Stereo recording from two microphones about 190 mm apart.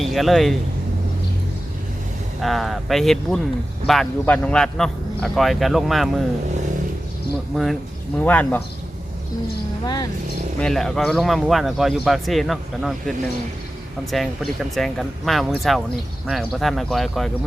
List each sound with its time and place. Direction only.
0.0 s speech: centre (ahead or behind)
2.4 s speech: centre (ahead or behind)
7.5 s speech: centre (ahead or behind)
9.8 s speech: 20° left (ahead or behind)
10.6 s speech: 5° left (ahead or behind)